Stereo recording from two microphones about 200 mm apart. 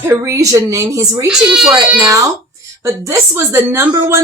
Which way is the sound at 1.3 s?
Centre (ahead or behind).